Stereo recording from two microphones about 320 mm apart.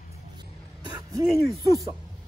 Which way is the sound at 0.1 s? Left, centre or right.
Centre.